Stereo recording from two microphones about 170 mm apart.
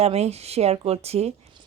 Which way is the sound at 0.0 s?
40° right (ahead or behind).